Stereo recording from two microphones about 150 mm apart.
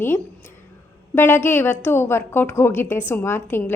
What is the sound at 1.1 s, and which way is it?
A woman's voice, 15° left (ahead or behind).